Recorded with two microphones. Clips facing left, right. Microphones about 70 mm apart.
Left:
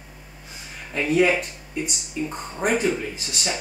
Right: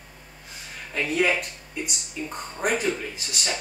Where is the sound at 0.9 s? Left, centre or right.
Centre.